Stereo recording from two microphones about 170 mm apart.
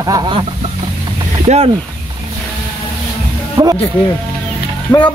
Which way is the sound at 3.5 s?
20° right (ahead or behind).